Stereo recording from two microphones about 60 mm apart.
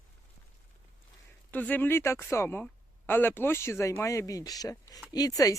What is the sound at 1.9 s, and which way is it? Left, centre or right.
Speech, left.